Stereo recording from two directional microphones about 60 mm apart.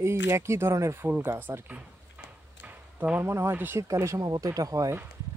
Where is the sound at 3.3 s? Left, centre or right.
Right.